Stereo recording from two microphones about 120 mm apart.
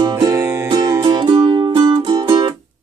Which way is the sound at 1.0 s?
40° right (ahead or behind).